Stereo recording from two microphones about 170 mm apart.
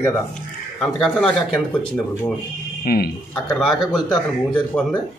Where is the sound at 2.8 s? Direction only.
65° left (ahead or behind).